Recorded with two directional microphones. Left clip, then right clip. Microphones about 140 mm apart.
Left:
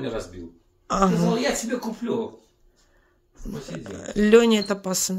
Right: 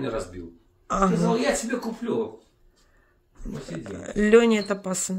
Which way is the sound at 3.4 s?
10° left (ahead or behind).